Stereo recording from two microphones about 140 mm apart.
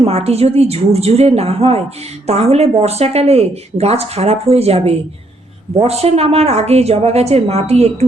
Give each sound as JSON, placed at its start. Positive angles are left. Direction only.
{"t": 0.0, "sound": "speech", "side_deg": -45}